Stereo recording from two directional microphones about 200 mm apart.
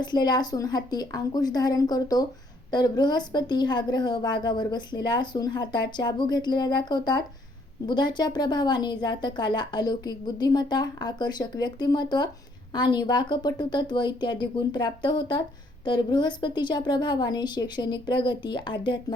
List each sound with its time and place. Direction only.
0.0 s speech: 20° left (ahead or behind)